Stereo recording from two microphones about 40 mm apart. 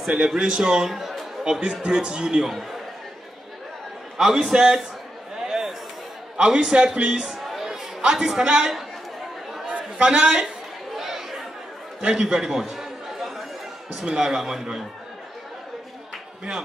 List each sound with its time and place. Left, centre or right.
0.3 s a man's voice: centre
4.4 s a man's voice: centre
5.3 s a sound: centre
6.3 s a man's voice: right
7.2 s music: centre
8.1 s a man's voice: centre
9.7 s chatter: right
10.0 s a man's voice: right
11.0 s chatter: centre
12.0 s chatter: centre
13.9 s a man's voice: centre